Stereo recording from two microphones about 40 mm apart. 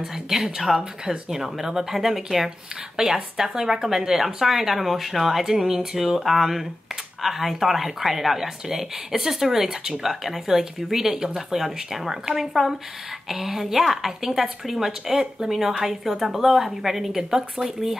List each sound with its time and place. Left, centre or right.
0.0 s speech: centre